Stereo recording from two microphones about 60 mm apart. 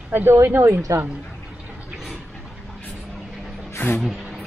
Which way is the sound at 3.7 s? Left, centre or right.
Left.